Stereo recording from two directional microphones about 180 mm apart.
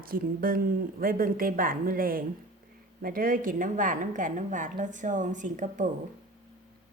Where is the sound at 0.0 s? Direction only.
55° right (ahead or behind).